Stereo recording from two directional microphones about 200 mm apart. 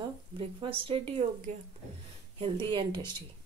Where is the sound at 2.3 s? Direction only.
25° right (ahead or behind).